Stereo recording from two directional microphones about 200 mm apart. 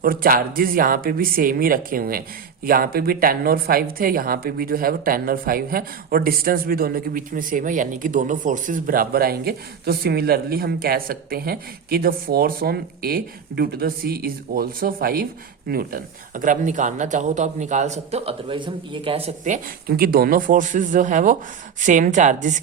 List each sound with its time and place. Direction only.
0.0 s a woman's voice: 45° right (ahead or behind)